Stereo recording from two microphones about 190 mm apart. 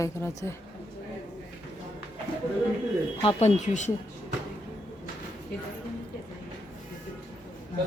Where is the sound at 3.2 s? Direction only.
30° left (ahead or behind).